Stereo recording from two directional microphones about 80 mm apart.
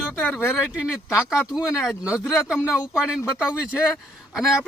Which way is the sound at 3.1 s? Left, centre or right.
Centre.